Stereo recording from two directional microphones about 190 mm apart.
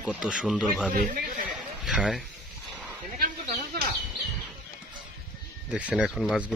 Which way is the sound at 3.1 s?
55° right (ahead or behind).